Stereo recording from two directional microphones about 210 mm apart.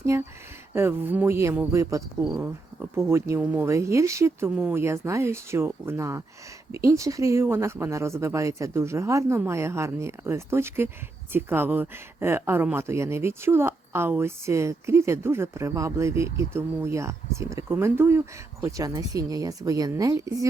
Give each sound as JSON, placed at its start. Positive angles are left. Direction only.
{"t": 0.0, "sound": "speech", "side_deg": -15}
{"t": 2.2, "sound": "speech", "side_deg": -5}